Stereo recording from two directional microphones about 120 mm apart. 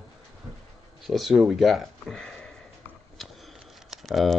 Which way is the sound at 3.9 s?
Centre (ahead or behind).